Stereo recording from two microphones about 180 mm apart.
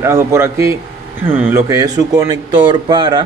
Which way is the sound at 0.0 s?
15° right (ahead or behind).